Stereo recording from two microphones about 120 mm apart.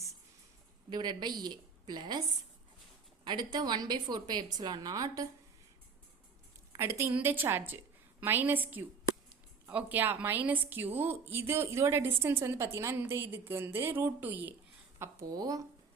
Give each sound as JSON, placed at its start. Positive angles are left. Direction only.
{"t": 0.9, "sound": "a woman's voice", "side_deg": -35}
{"t": 3.2, "sound": "a woman's voice", "side_deg": -35}
{"t": 6.7, "sound": "a woman's voice", "side_deg": -25}
{"t": 14.9, "sound": "a woman's voice", "side_deg": -25}